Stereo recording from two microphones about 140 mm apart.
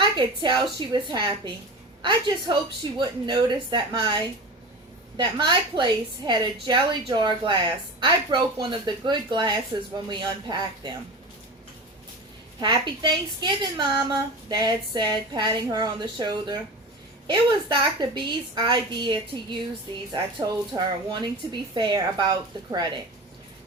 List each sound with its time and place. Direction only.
0.0 s a woman's voice: 35° right (ahead or behind)
12.5 s a woman's voice: 35° right (ahead or behind)